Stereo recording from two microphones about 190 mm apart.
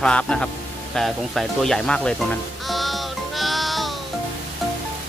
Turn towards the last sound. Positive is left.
turn(degrees=0)  # may be behind; listen again after turning